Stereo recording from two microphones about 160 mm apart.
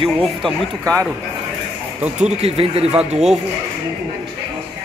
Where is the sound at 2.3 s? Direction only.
40° right (ahead or behind).